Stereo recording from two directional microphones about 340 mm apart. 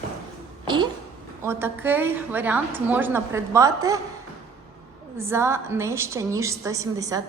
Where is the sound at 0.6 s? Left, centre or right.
Centre.